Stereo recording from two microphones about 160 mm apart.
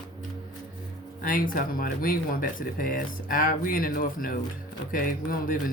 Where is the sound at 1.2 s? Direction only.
60° left (ahead or behind).